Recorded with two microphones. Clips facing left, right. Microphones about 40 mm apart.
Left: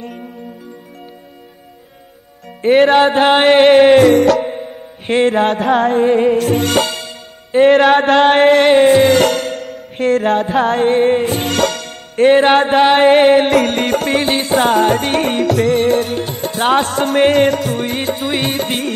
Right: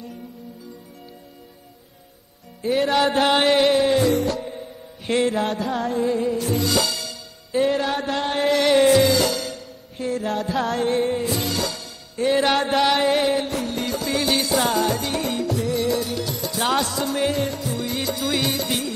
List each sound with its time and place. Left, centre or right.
2.6 s music: left
4.6 s music: left
7.6 s music: left
12.4 s chant: left
13.5 s music: left